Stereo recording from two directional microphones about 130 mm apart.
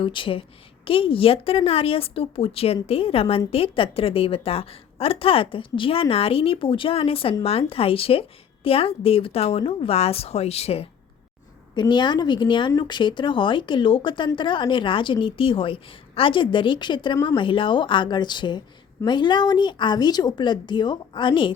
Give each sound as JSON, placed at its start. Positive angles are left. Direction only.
{"t": 0.0, "sound": "a woman's voice", "side_deg": 40}
{"t": 11.7, "sound": "a woman's voice", "side_deg": 35}